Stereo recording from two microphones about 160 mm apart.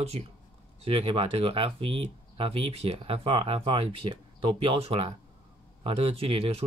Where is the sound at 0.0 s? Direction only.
40° right (ahead or behind).